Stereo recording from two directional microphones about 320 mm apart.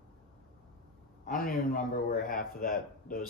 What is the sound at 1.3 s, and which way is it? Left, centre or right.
A man's voice, left.